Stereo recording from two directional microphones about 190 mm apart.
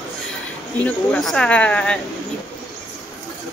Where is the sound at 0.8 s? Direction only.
5° left (ahead or behind).